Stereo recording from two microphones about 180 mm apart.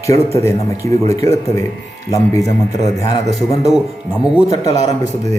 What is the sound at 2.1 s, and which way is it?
Speech, 15° left (ahead or behind).